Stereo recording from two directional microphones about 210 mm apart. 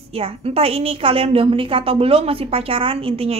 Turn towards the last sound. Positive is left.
turn(degrees=-25)  # may be behind; listen again after turning